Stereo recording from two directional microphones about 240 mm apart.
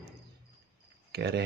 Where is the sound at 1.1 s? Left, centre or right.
Right.